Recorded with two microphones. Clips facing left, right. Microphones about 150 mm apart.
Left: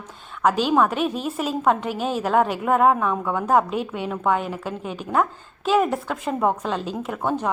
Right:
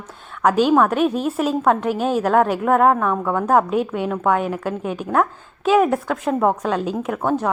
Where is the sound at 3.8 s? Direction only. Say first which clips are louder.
Right 5 dB; 50° right (ahead or behind).